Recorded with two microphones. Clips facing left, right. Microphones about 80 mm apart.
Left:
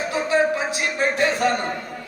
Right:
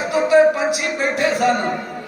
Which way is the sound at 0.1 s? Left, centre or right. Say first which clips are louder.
Right 8 dB; left.